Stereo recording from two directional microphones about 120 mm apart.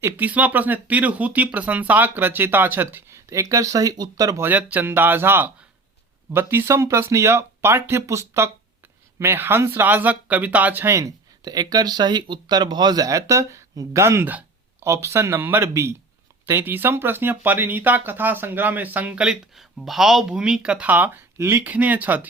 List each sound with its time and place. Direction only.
0.0 s speech: 15° right (ahead or behind); by 4.4 s 30° right (ahead or behind)
4.4 s speech: 15° right (ahead or behind)